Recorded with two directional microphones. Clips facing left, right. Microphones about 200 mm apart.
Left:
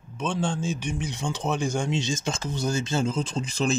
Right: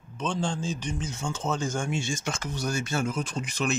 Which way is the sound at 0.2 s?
5° left (ahead or behind).